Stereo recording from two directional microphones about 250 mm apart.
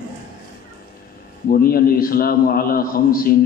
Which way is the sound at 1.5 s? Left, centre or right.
Left.